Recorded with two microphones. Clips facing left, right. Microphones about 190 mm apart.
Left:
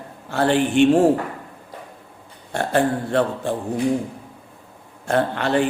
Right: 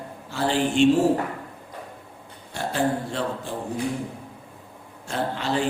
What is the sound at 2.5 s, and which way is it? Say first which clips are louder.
Speech: left 5 dB; 60° left (ahead or behind).